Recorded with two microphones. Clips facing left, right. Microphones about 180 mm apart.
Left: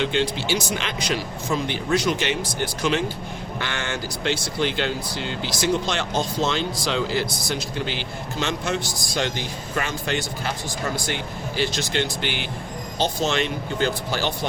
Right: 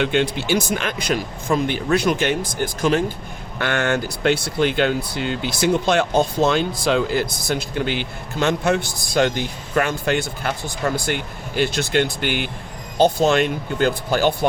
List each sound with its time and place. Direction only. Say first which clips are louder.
0.0 s speech: right 3 dB; 55° right (ahead or behind)